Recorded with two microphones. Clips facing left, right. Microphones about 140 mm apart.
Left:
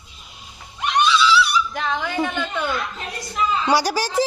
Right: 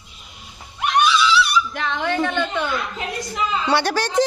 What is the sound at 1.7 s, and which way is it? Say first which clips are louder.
Speech: right 1 dB; centre (ahead or behind).